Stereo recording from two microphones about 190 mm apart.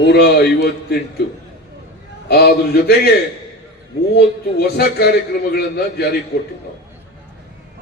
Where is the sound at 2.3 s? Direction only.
55° left (ahead or behind).